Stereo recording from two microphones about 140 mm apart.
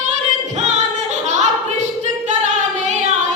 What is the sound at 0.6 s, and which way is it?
Singing, 55° right (ahead or behind).